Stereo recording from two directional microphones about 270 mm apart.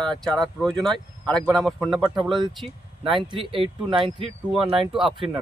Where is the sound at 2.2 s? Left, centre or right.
Centre.